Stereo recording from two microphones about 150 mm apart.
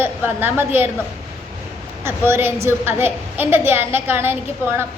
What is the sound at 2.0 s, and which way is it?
A woman's voice, 15° right (ahead or behind).